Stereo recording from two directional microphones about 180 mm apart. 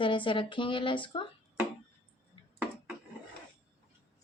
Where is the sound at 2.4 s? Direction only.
30° left (ahead or behind).